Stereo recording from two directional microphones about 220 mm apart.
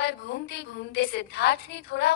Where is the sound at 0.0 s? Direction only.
50° left (ahead or behind).